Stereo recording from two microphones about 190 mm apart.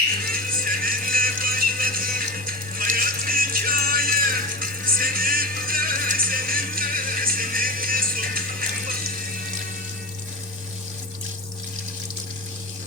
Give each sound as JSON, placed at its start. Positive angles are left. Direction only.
{"t": 0.3, "sound": "music", "side_deg": -45}